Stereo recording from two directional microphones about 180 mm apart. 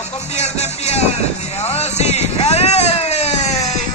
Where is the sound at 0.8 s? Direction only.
35° left (ahead or behind).